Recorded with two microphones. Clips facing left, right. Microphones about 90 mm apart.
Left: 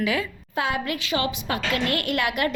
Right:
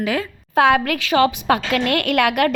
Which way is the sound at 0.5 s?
70° right (ahead or behind).